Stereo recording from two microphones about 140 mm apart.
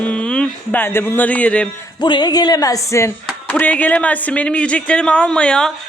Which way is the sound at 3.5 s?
10° left (ahead or behind).